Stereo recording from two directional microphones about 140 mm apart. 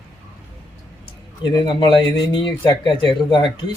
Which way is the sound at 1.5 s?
30° left (ahead or behind).